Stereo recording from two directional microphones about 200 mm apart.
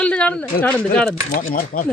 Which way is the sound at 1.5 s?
45° left (ahead or behind).